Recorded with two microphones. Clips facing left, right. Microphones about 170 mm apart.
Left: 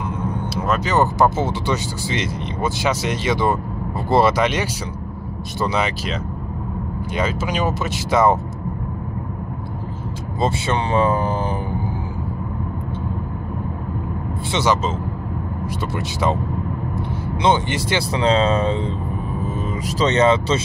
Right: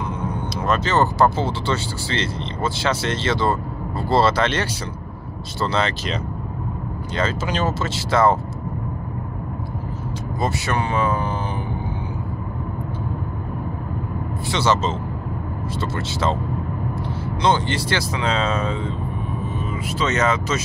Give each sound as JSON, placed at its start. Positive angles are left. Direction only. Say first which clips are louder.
{"t": 0.7, "sound": "speech", "louder": "even", "side_deg": 15}
{"t": 7.2, "sound": "speech", "louder": "left 1 dB", "side_deg": 10}
{"t": 10.4, "sound": "speech", "louder": "left 3 dB", "side_deg": 30}
{"t": 14.5, "sound": "speech", "louder": "left 1 dB", "side_deg": 15}
{"t": 17.4, "sound": "speech", "louder": "left 1 dB", "side_deg": 20}
{"t": 18.1, "sound": "speech", "louder": "left 7 dB", "side_deg": 35}
{"t": 20.0, "sound": "speech", "louder": "left 5 dB", "side_deg": 30}